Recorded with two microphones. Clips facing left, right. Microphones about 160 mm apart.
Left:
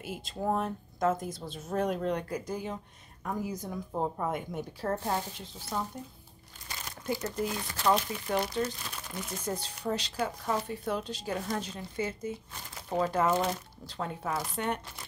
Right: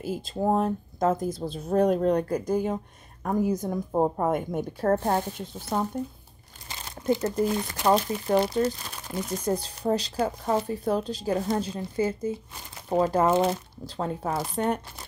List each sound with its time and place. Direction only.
0.0 s speech: 35° right (ahead or behind); by 5.9 s 50° right (ahead or behind)
6.7 s crumpling: 25° right (ahead or behind)
7.8 s speech: 40° right (ahead or behind)